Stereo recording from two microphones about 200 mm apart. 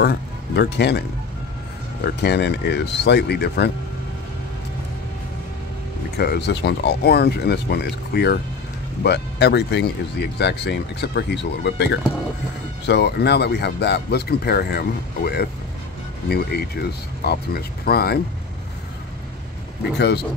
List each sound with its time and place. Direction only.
0.0 s speech: 55° left (ahead or behind)
2.2 s speech: 55° left (ahead or behind)
6.1 s speech: 55° left (ahead or behind)